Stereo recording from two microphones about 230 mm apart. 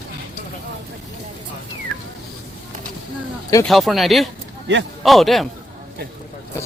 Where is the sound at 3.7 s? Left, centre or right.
Centre.